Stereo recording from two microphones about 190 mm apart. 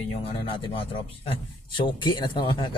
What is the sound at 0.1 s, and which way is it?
Speech, 30° left (ahead or behind).